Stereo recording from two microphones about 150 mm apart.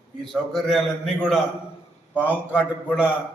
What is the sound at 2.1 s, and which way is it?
Speech, 10° right (ahead or behind).